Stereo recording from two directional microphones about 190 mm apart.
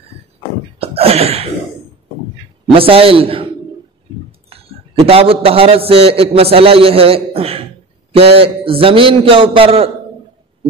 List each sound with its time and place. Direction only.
0.7 s a sound: 30° right (ahead or behind)
2.7 s a man's voice: 30° right (ahead or behind)
4.5 s a man's voice: 30° right (ahead or behind)